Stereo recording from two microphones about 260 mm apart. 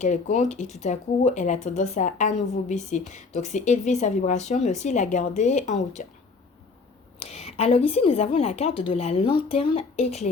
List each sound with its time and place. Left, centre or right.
0.0 s speech: left
7.2 s speech: left